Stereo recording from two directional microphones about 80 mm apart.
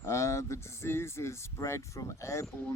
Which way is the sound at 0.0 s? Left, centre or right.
Left.